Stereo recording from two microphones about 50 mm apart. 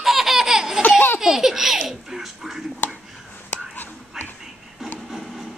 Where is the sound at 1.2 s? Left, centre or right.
Centre.